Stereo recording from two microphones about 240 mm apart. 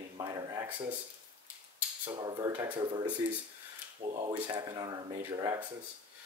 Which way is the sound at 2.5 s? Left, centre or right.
Centre.